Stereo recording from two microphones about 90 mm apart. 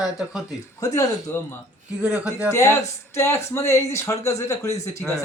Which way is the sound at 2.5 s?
30° left (ahead or behind).